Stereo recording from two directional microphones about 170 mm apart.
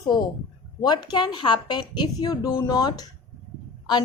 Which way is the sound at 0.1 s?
25° left (ahead or behind).